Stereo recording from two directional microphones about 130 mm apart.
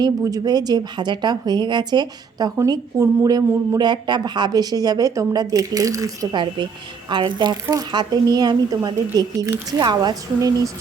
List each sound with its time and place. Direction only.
0.0 s a woman's voice: 30° right (ahead or behind)
7.1 s a woman's voice: 40° right (ahead or behind)
7.5 s a woman's voice: 25° right (ahead or behind)